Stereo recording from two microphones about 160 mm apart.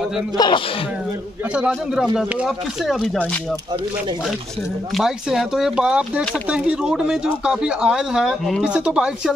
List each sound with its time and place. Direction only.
0.4 s speech: 30° left (ahead or behind)
1.4 s a man's voice: 5° right (ahead or behind)
4.9 s speech: centre (ahead or behind)